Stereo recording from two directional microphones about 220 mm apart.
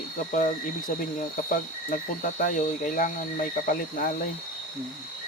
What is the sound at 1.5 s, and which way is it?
Cricket, 35° left (ahead or behind).